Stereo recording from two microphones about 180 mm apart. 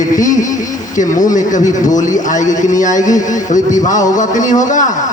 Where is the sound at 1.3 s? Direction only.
45° left (ahead or behind).